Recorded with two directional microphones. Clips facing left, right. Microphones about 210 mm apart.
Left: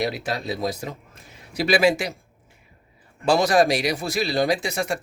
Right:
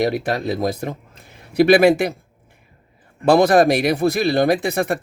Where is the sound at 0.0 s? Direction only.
50° right (ahead or behind).